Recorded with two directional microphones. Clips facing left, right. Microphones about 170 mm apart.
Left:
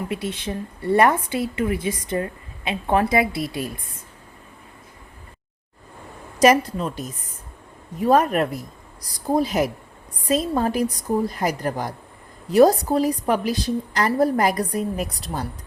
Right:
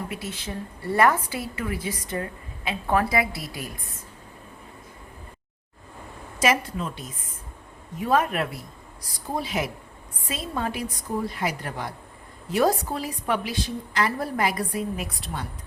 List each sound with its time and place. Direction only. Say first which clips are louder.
0.3 s a woman's voice: left 5 dB; 25° left (ahead or behind)
6.4 s a woman's voice: left 7 dB; 40° left (ahead or behind)